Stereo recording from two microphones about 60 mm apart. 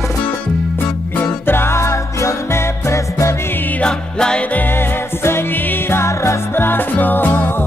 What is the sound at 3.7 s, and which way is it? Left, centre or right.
Music, centre.